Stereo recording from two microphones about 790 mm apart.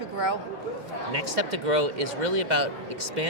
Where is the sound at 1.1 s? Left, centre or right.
Right.